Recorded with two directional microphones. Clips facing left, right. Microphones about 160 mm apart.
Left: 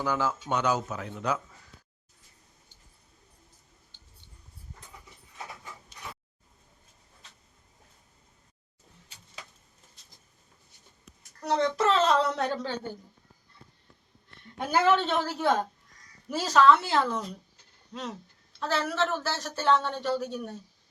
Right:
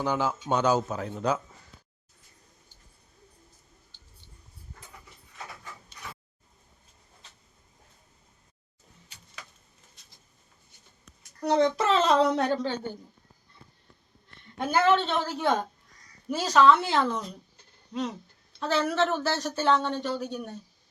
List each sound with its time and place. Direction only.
0.0 s speech: 20° right (ahead or behind)
0.5 s a man's voice: 30° right (ahead or behind)
3.9 s a sound: 20° left (ahead or behind)
11.8 s speech: centre (ahead or behind)
14.6 s a woman's voice: 10° left (ahead or behind)